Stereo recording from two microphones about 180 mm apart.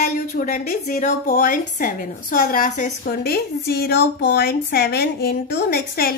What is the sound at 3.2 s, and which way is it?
A woman's voice, 60° left (ahead or behind).